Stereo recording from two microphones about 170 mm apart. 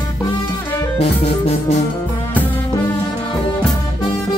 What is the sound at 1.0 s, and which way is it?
Music, 35° left (ahead or behind).